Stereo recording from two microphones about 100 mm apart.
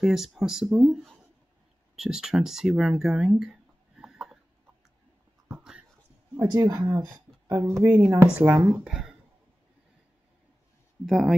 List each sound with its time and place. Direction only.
0.0 s speech: 5° right (ahead or behind)
4.0 s a sound: 5° right (ahead or behind)
5.5 s dog: 10° right (ahead or behind)
6.3 s speech: 35° right (ahead or behind)
8.8 s speech: 5° right (ahead or behind)
11.1 s speech: centre (ahead or behind)